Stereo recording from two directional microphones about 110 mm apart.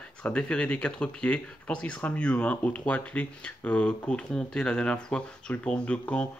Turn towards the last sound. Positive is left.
turn(degrees=10)  # may be behind; listen again after turning